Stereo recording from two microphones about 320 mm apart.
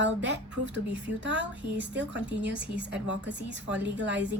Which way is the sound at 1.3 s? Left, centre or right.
Right.